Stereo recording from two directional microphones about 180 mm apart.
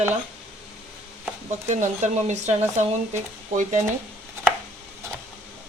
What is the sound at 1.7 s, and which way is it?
Speech, 40° right (ahead or behind).